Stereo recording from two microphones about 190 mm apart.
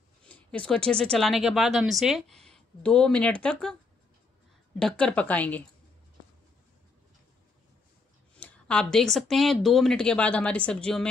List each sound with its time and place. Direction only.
0.2 s speech: 5° left (ahead or behind)
4.7 s speech: 5° left (ahead or behind)
8.4 s speech: 5° left (ahead or behind)